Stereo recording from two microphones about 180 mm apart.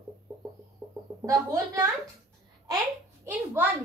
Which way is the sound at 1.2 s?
20° right (ahead or behind).